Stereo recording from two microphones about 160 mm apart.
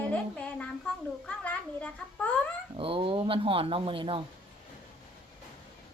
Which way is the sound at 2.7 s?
35° right (ahead or behind).